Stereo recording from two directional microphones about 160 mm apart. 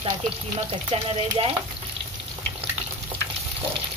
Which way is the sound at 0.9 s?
35° right (ahead or behind).